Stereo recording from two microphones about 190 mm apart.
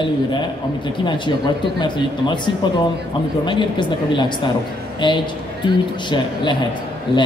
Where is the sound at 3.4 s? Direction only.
25° left (ahead or behind).